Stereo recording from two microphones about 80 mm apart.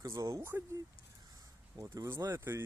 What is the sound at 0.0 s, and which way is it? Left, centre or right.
Speech, right.